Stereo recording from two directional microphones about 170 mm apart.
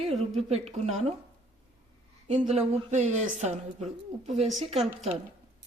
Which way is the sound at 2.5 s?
40° right (ahead or behind).